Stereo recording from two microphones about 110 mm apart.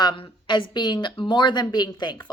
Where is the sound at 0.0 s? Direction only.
45° left (ahead or behind).